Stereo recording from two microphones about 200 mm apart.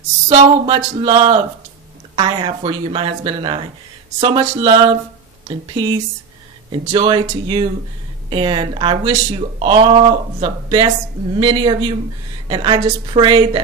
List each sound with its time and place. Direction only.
0.3 s speech: 25° right (ahead or behind)